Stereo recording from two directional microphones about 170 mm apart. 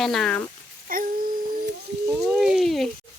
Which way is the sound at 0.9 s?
55° right (ahead or behind).